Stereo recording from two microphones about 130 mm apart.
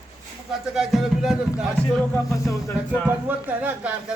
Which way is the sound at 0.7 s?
5° right (ahead or behind).